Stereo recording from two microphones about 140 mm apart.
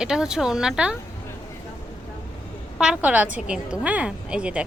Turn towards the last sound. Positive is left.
turn(degrees=-5)  # may be behind; listen again after turning